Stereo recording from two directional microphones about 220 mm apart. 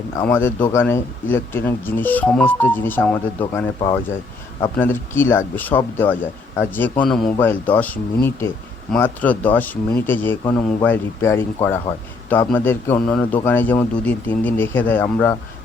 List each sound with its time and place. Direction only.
0.2 s speech: 10° left (ahead or behind)
3.8 s speech: 20° left (ahead or behind)
4.8 s a man's voice: 10° left (ahead or behind)